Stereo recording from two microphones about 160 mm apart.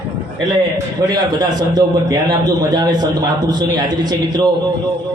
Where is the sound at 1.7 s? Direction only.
25° right (ahead or behind).